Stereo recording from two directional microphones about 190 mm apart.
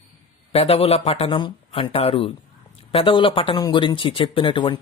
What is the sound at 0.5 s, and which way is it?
Speech, 30° left (ahead or behind).